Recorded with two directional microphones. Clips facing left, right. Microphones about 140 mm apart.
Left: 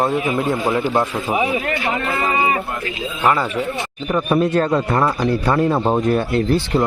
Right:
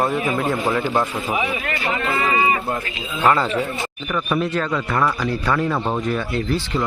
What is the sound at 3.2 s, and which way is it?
Speech, centre (ahead or behind).